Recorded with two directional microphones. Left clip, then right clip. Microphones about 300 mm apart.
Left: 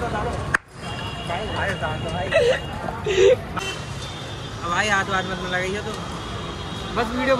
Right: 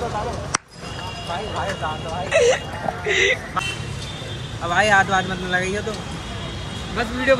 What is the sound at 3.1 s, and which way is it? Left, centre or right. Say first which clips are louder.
Speech: left 2 dB; centre.